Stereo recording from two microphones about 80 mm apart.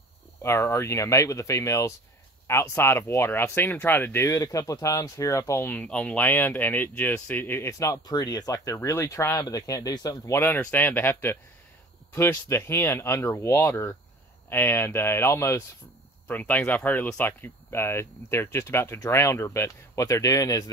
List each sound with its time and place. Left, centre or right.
0.4 s speech: left
4.4 s speech: left
5.7 s speech: centre
7.8 s speech: left
8.7 s speech: left
9.3 s speech: left
10.6 s speech: left
16.3 s speech: left